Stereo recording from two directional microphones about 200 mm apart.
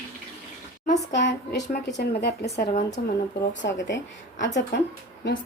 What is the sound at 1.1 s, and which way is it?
Speech, 60° left (ahead or behind).